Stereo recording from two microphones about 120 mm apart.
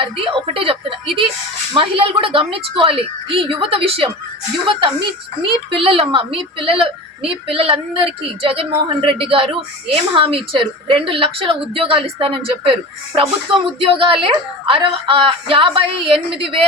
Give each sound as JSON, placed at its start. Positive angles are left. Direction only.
{"t": 0.0, "sound": "speech", "side_deg": -50}